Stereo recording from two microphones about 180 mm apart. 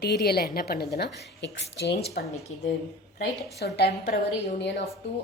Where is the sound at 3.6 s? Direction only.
65° left (ahead or behind).